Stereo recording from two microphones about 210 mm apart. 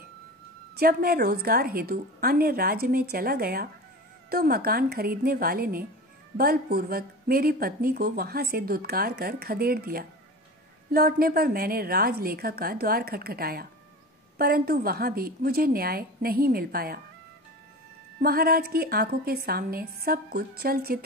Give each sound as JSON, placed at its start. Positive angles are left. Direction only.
{"t": 0.7, "sound": "speech", "side_deg": -45}
{"t": 18.2, "sound": "speech", "side_deg": -45}